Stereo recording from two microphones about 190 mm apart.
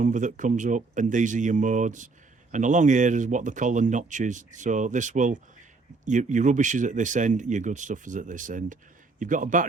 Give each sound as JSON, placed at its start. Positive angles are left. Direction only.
{"t": 0.0, "sound": "speech", "side_deg": -40}